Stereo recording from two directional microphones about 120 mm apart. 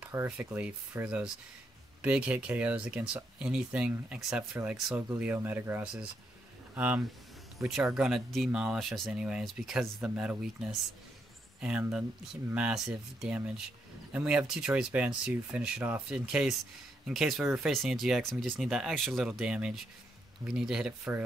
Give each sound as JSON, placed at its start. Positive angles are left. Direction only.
{"t": 0.0, "sound": "a sound", "side_deg": -20}
{"t": 0.4, "sound": "speech", "side_deg": -10}
{"t": 5.2, "sound": "speech", "side_deg": -15}